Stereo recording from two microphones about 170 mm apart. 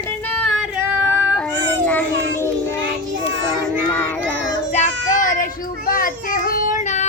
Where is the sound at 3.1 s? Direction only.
90° right.